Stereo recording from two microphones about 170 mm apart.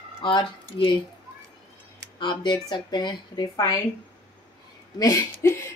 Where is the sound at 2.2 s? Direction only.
25° left (ahead or behind).